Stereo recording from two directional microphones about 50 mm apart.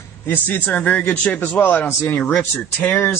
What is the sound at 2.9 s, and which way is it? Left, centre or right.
Speech, left.